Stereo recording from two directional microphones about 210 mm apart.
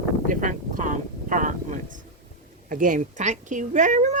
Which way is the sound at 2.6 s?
40° right (ahead or behind).